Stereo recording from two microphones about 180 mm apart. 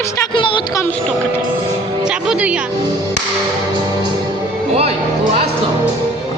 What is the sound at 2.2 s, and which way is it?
Speech, 5° right (ahead or behind).